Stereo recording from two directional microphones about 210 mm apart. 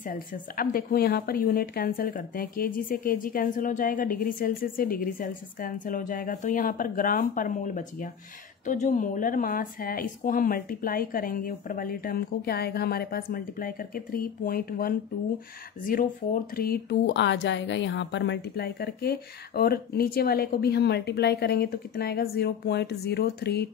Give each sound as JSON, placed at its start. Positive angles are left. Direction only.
{"t": 0.0, "sound": "speech", "side_deg": 40}